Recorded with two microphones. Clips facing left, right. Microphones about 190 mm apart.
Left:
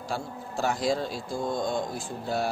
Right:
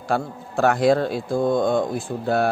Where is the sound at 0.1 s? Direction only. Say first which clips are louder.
Right 10 dB; 60° right (ahead or behind).